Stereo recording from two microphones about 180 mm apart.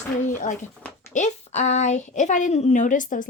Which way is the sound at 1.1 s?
40° left (ahead or behind).